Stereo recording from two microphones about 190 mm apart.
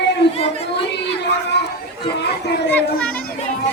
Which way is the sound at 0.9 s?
60° left (ahead or behind).